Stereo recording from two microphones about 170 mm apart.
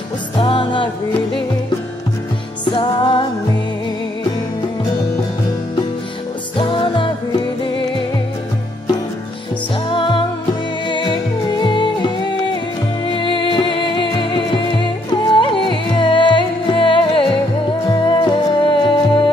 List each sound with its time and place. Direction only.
0.4 s music: 30° left (ahead or behind)
2.6 s music: 30° left (ahead or behind)
6.5 s music: 30° left (ahead or behind)
9.8 s music: 30° left (ahead or behind)